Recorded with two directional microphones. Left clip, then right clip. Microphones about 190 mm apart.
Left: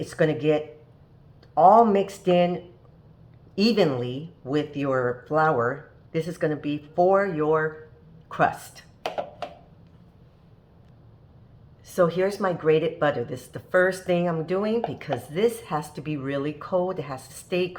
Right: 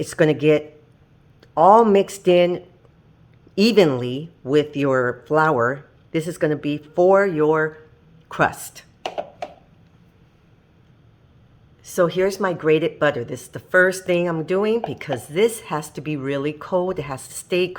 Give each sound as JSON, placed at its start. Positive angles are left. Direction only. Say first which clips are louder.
{"t": 0.0, "sound": "speech", "louder": "right 6 dB", "side_deg": -65}
{"t": 11.9, "sound": "speech", "louder": "right 3 dB", "side_deg": -40}
{"t": 17.1, "sound": "speech", "louder": "right 5 dB", "side_deg": -40}